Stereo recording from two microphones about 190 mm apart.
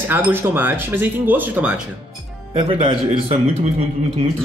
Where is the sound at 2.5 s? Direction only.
25° right (ahead or behind).